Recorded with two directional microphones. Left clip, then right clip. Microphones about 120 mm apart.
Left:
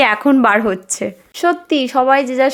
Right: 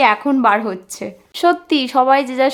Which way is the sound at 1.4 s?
5° left (ahead or behind).